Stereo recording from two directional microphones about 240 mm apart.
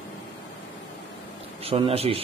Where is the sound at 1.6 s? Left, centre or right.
Right.